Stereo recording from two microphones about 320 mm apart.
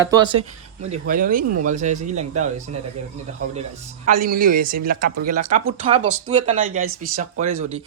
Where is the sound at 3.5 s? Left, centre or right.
Right.